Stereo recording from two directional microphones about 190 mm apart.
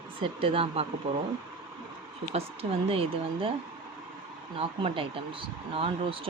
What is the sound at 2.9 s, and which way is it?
Speech, 30° right (ahead or behind).